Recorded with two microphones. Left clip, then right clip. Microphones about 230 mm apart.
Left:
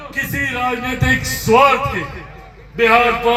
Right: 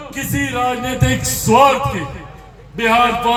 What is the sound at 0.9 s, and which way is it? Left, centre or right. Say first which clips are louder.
A man's voice: left 2 dB; right.